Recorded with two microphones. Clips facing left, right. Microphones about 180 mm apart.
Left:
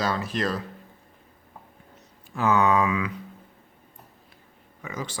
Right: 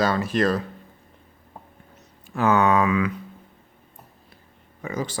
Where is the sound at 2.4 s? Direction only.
60° right (ahead or behind).